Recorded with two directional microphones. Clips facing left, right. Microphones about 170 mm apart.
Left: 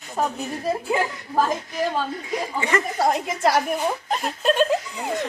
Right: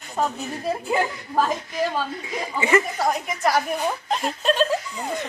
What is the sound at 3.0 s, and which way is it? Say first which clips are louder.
Speech: left 2 dB; 30° left (ahead or behind).